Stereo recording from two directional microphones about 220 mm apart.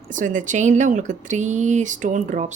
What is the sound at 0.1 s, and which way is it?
Speech, 35° right (ahead or behind).